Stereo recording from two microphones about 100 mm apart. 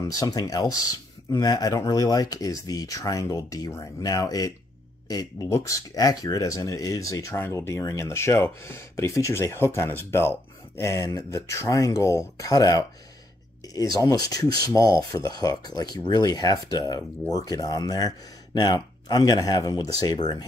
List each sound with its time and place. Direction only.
0.0 s speech: 35° left (ahead or behind)